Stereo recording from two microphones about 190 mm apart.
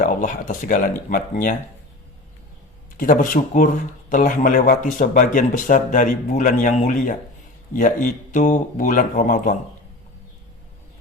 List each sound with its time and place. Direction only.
0.0 s speech: 45° left (ahead or behind)
3.0 s speech: 45° left (ahead or behind)